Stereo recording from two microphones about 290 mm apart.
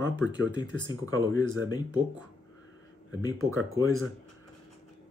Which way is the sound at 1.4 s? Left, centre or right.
Right.